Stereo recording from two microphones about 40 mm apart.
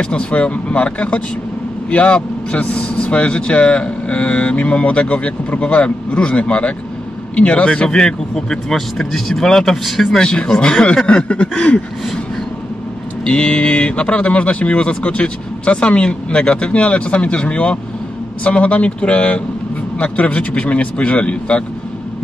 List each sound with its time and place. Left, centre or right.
0.0 s speech: left
11.2 s speech: left
13.2 s speech: left